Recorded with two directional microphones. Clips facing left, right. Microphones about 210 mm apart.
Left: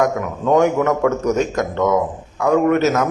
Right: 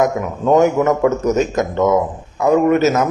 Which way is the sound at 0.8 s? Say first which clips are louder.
Right 2 dB; 20° right (ahead or behind).